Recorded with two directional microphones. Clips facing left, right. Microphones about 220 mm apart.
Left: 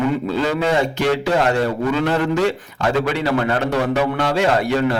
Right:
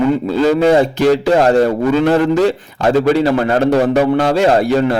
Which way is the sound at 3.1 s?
35° right (ahead or behind).